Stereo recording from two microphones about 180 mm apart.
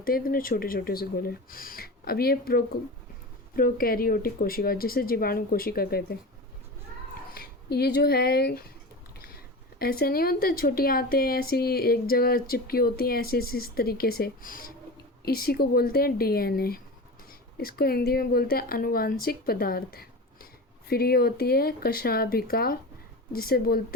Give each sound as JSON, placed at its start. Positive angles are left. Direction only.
{"t": 0.0, "sound": "speech", "side_deg": 55}
{"t": 7.3, "sound": "speech", "side_deg": 60}